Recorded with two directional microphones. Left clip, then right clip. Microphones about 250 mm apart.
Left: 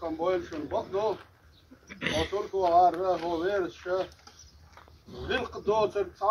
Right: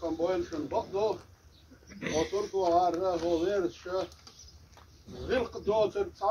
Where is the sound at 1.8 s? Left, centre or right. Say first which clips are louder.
Left 1 dB; left.